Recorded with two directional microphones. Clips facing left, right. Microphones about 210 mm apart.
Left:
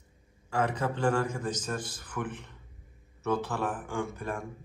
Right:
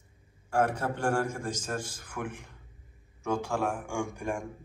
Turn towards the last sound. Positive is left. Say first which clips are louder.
# right 1 dB
turn(degrees=-15)  # may be behind; listen again after turning